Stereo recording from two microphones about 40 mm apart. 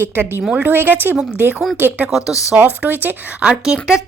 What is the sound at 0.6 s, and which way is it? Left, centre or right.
Speech, right.